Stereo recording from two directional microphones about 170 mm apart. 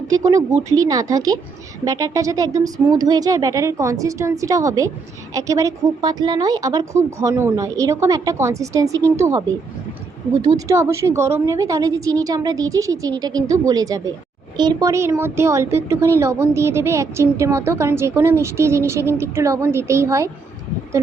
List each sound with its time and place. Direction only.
0.1 s a woman's voice: 20° right (ahead or behind)
10.7 s a woman's voice: 15° right (ahead or behind)